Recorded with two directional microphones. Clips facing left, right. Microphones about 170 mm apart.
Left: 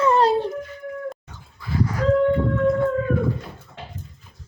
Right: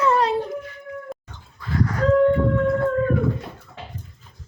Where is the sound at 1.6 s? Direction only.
10° left (ahead or behind).